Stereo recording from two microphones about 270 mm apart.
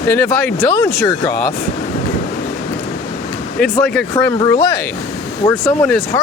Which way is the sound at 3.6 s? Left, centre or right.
Centre.